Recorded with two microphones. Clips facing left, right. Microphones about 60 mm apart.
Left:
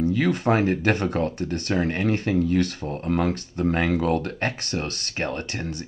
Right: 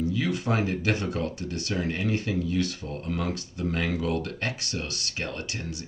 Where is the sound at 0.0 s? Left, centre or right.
Left.